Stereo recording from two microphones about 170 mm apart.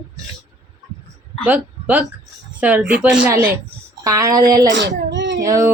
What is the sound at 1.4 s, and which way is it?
A woman's voice, 10° right (ahead or behind).